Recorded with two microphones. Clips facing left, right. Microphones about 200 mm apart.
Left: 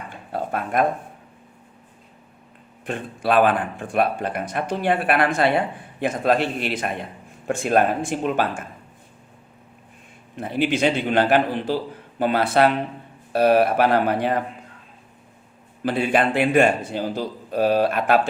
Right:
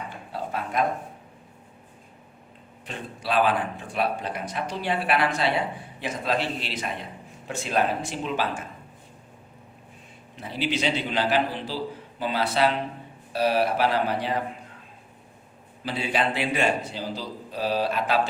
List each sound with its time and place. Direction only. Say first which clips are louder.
0.3 s a sound: left 6 dB; 55° left (ahead or behind)
2.8 s speech: left 8 dB; 50° left (ahead or behind)
10.3 s speech: left 6 dB; 55° left (ahead or behind)
15.8 s speech: left 6 dB; 55° left (ahead or behind)